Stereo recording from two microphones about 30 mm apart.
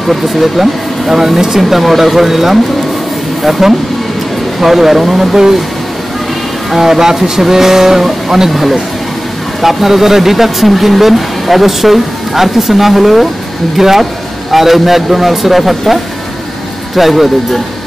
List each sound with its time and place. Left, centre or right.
0.1 s speech: centre
6.7 s speech: centre
16.9 s speech: centre